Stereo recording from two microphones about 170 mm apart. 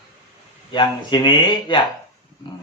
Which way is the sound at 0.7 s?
25° left (ahead or behind).